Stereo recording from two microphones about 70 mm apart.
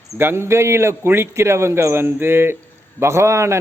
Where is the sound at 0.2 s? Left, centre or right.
Right.